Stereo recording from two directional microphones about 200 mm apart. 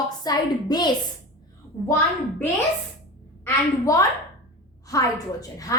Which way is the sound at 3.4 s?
15° left (ahead or behind).